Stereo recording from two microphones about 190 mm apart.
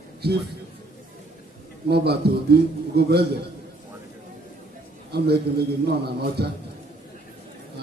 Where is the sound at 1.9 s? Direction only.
60° right (ahead or behind).